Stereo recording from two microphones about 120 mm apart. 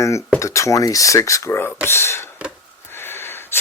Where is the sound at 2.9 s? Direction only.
20° left (ahead or behind).